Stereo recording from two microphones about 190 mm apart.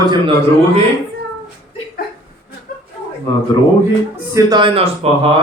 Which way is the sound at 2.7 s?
50° left (ahead or behind).